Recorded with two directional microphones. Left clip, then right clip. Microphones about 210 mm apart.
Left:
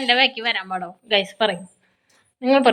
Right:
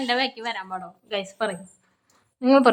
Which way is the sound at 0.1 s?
5° right (ahead or behind).